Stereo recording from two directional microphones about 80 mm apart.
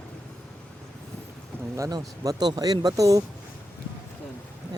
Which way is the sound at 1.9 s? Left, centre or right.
Right.